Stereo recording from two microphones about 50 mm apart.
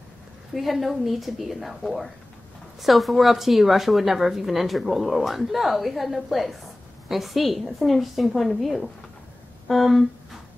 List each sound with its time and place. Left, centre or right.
0.6 s speech: centre